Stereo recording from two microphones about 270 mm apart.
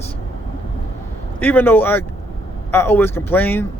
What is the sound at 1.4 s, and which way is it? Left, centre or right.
Speech, centre.